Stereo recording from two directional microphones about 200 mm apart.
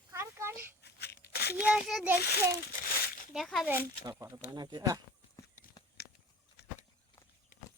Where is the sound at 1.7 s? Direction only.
5° right (ahead or behind).